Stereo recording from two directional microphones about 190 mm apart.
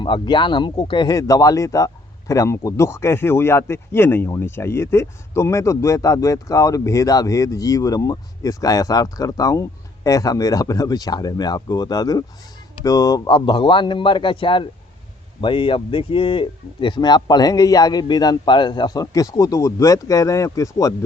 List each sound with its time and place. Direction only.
0.0 s a man's voice: 25° left (ahead or behind)